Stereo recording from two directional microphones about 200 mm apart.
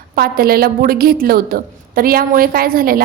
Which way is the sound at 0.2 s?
50° right (ahead or behind).